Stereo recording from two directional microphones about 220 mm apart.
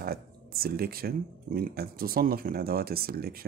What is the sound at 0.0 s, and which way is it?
Speech, 45° right (ahead or behind).